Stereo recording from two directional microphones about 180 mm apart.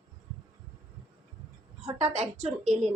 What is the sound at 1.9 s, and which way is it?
A woman's voice, 35° right (ahead or behind).